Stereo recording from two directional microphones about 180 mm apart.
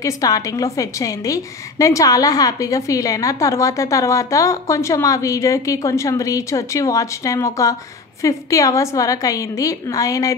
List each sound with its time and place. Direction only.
0.0 s a woman's voice: 20° left (ahead or behind)